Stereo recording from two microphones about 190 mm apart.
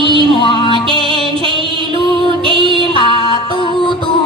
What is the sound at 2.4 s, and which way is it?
Music, 25° right (ahead or behind).